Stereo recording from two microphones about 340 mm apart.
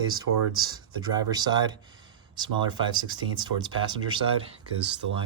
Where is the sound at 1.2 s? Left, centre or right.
Centre.